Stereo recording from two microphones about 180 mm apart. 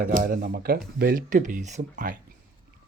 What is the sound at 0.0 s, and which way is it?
Speech, 50° right (ahead or behind).